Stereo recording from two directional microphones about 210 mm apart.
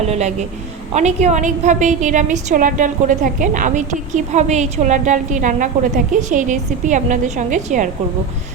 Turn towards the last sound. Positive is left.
turn(degrees=-35)  # may be behind; listen again after turning